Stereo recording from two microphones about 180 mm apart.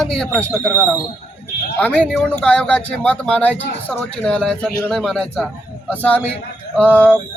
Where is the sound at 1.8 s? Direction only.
5° left (ahead or behind).